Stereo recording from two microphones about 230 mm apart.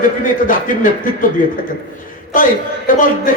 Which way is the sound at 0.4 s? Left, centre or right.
Left.